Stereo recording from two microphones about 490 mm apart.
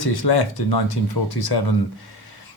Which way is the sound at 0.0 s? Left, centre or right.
Left.